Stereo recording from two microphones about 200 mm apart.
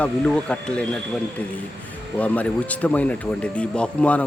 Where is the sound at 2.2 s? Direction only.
5° left (ahead or behind).